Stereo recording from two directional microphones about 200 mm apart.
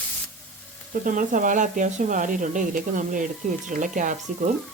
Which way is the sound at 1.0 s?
40° right (ahead or behind).